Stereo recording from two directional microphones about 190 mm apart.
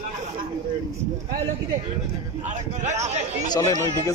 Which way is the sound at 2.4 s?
40° right (ahead or behind).